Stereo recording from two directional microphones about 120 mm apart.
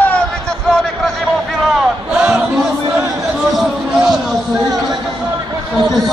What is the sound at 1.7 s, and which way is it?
Crowd, 5° right (ahead or behind).